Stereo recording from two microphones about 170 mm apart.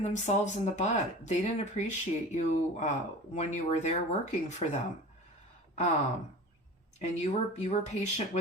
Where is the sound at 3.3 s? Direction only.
45° left (ahead or behind).